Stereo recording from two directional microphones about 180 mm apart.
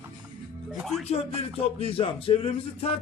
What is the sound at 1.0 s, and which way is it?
Speech, 35° left (ahead or behind).